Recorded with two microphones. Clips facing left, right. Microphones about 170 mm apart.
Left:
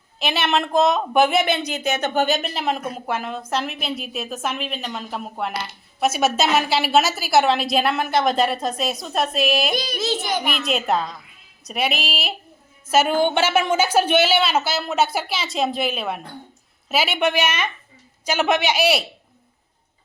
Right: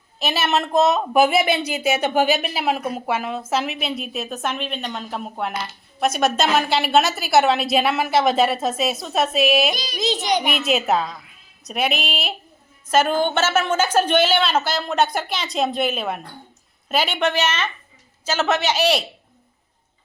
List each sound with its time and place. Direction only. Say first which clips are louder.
0.2 s speech: even; centre (ahead or behind)
9.7 s a child's voice: left 6 dB; 55° left (ahead or behind)
10.0 s a child's voice: right 6 dB; 20° right (ahead or behind)
10.4 s a woman's voice: right 2 dB; 5° right (ahead or behind)